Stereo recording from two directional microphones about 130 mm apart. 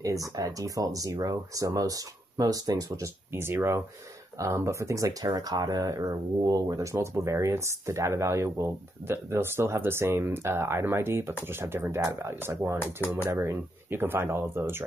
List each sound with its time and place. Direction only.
0.0 s speech: 25° right (ahead or behind)